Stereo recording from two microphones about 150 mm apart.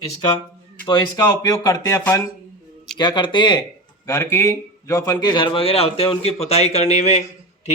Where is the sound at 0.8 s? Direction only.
25° left (ahead or behind).